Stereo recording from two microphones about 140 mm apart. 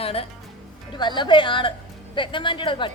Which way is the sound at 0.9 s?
35° left (ahead or behind).